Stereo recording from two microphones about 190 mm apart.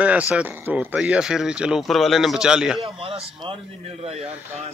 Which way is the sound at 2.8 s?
30° right (ahead or behind).